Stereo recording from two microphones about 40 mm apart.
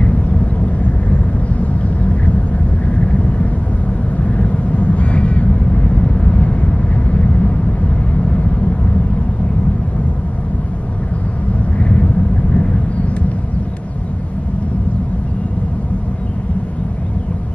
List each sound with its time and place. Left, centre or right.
0.0 s vehicle: left
11.8 s vehicle: left